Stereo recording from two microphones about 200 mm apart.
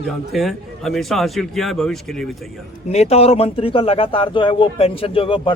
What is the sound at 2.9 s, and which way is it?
Speech, 30° left (ahead or behind).